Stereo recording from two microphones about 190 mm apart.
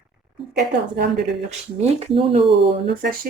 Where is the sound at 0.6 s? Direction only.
60° right (ahead or behind).